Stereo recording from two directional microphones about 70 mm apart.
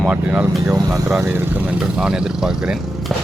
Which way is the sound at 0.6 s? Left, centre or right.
Right.